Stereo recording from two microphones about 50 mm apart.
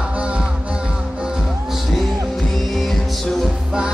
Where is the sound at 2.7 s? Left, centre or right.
Centre.